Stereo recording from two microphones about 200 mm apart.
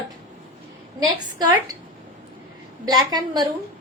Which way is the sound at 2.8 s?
20° right (ahead or behind).